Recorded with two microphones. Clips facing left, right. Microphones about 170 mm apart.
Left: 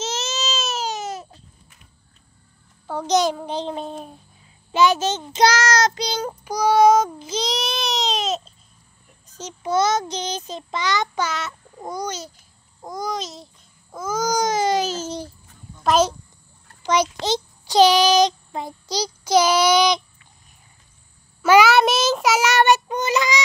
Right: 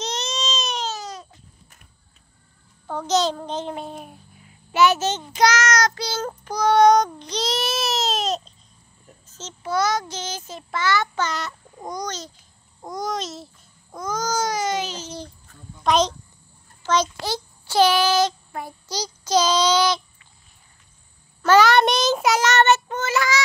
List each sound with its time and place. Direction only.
0.0 s baby cry: 5° left (ahead or behind)
0.8 s baby cry: 20° left (ahead or behind)
2.9 s a child's voice: 10° left (ahead or behind)
3.7 s babbling: 5° right (ahead or behind)
4.0 s a sound: 30° left (ahead or behind)
4.7 s a child's voice: 15° left (ahead or behind)
5.3 s child singing: 30° left (ahead or behind); by 8.5 s centre (ahead or behind)
9.3 s a child's voice: 15° left (ahead or behind)
11.2 s a child's voice: 5° left (ahead or behind)
12.8 s babbling: centre (ahead or behind)
13.9 s speech: 5° left (ahead or behind); by 15.0 s 40° left (ahead or behind)
15.8 s a child's voice: 5° left (ahead or behind)
21.4 s child singing: 10° left (ahead or behind)